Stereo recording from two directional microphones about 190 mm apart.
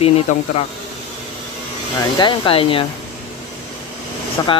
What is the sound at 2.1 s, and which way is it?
Speech, 25° left (ahead or behind).